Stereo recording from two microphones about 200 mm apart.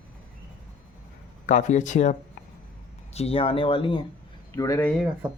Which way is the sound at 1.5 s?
40° left (ahead or behind).